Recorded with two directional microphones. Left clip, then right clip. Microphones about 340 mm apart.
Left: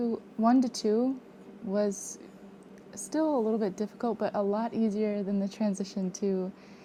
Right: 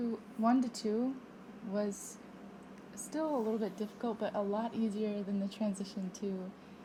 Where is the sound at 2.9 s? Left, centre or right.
Left.